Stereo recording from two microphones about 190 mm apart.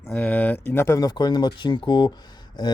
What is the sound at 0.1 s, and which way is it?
Speech, 5° left (ahead or behind).